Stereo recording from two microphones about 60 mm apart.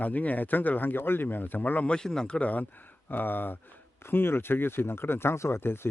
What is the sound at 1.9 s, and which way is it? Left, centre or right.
Speech, centre.